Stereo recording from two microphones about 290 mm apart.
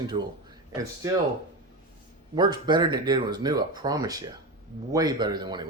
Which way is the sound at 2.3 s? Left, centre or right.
Centre.